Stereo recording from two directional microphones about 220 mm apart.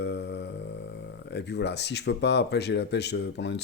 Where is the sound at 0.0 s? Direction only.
50° left (ahead or behind).